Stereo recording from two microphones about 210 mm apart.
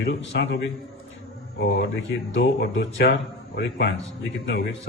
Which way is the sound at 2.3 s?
55° left (ahead or behind).